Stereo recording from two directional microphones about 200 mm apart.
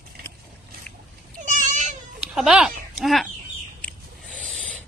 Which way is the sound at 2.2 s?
5° right (ahead or behind).